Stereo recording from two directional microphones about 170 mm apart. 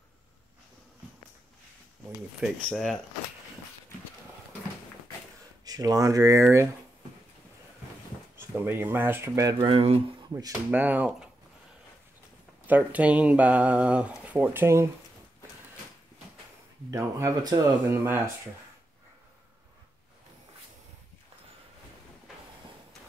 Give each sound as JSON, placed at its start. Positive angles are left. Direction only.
{"t": 2.4, "sound": "speech", "side_deg": 0}
{"t": 5.7, "sound": "speech", "side_deg": -20}
{"t": 8.4, "sound": "speech", "side_deg": -15}
{"t": 10.3, "sound": "speech", "side_deg": -15}
{"t": 12.6, "sound": "speech", "side_deg": -10}
{"t": 16.9, "sound": "speech", "side_deg": -20}